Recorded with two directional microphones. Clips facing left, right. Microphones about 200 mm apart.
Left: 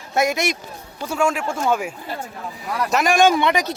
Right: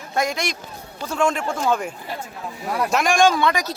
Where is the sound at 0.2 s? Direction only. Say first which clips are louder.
Left 4 dB; 10° left (ahead or behind).